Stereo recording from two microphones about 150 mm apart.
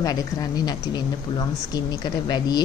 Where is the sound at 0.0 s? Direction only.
25° left (ahead or behind).